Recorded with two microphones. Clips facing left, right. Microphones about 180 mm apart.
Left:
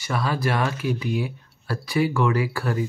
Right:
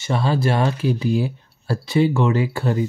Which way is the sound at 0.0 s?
25° right (ahead or behind).